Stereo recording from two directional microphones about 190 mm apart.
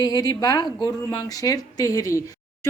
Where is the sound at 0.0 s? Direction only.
20° left (ahead or behind).